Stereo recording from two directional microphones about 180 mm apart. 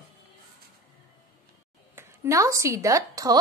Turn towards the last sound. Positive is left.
turn(degrees=-20)  # may be behind; listen again after turning